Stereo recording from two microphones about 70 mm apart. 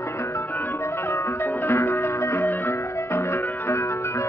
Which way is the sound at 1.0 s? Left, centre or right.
Left.